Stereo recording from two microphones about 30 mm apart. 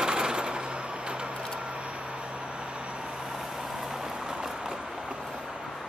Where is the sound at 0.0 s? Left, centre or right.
Right.